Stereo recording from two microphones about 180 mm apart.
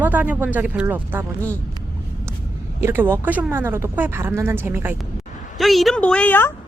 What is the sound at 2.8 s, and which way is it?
Speech, 10° right (ahead or behind).